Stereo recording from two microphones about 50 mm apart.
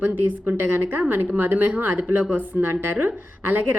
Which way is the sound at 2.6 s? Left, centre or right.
Right.